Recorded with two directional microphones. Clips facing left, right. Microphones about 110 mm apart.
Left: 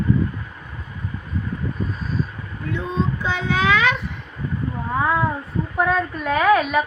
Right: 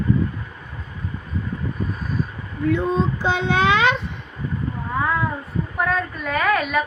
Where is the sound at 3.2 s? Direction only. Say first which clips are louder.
Right 2 dB; 30° right (ahead or behind).